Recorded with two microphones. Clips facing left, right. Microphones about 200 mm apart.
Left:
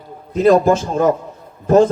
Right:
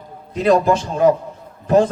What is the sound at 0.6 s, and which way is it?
Speech, 45° left (ahead or behind).